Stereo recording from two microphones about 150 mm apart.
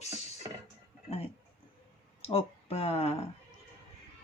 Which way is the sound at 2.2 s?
40° left (ahead or behind).